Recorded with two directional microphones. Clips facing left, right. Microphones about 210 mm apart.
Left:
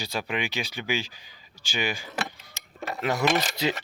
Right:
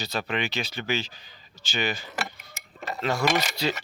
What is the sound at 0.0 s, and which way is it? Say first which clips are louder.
Speech: right 1 dB; 10° left (ahead or behind).